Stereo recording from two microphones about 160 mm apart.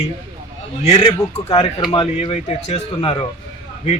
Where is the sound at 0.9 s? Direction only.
35° left (ahead or behind).